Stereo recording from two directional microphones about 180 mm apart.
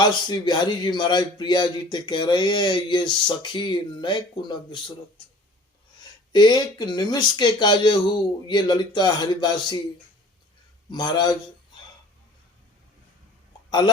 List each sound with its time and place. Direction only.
0.0 s speech: 25° left (ahead or behind)
6.3 s speech: 25° left (ahead or behind)
10.9 s speech: 25° left (ahead or behind)
13.7 s speech: 25° left (ahead or behind)